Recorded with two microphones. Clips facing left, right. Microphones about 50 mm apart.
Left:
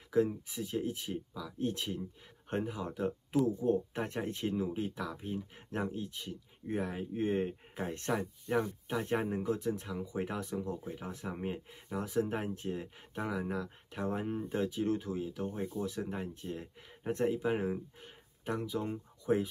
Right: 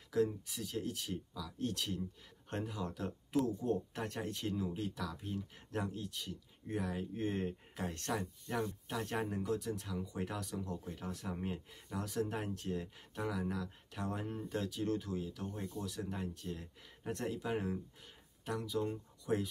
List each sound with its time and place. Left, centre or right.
0.1 s speech: left